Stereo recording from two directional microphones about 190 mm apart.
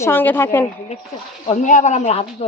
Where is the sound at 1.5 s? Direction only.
40° left (ahead or behind).